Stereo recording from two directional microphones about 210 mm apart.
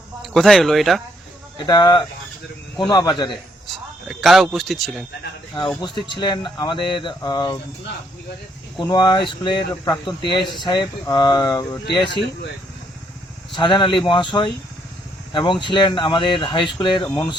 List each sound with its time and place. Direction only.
0.2 s speech: centre (ahead or behind)
1.5 s speech: 20° left (ahead or behind)
4.1 s speech: centre (ahead or behind)
5.5 s speech: 20° left (ahead or behind)
5.9 s speech: 25° right (ahead or behind)
6.1 s speech: 20° left (ahead or behind)
8.8 s speech: 20° left (ahead or behind)
13.6 s speech: 20° left (ahead or behind)